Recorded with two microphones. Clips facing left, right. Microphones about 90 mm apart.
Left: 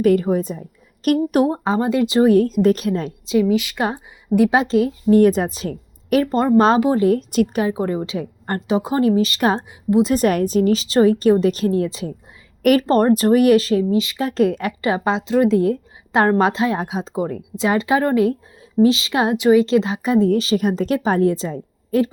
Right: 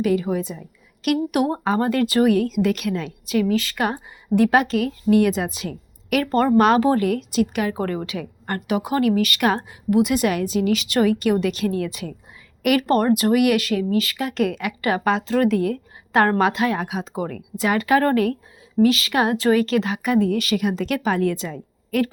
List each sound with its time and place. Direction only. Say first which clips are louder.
0.0 s a woman's voice: left 5 dB; 45° left (ahead or behind)
1.6 s a woman's voice: left 2 dB; 20° left (ahead or behind)
2.3 s a woman's voice: left 5 dB; 40° left (ahead or behind)
3.2 s a woman's voice: left 3 dB; 20° left (ahead or behind); by 6.2 s 35° left (ahead or behind)
6.2 s a woman's voice: even; 20° left (ahead or behind)
6.7 s a woman's voice: left 1 dB; 15° left (ahead or behind)
7.0 s a woman's voice: left 5 dB; 35° left (ahead or behind)
7.7 s a woman's voice: left 3 dB; 15° left (ahead or behind)
14.2 s a woman's voice: left 4 dB; 35° left (ahead or behind)
14.8 s a woman's voice: right 1 dB; 25° left (ahead or behind)